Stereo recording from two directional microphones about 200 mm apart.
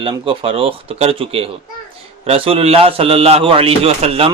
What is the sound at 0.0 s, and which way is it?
A man's voice, 25° right (ahead or behind).